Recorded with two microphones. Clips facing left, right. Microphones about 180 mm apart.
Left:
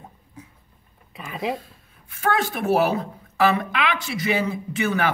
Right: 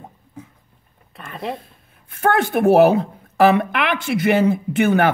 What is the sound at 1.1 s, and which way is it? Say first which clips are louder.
Speech: left 1 dB; centre (ahead or behind).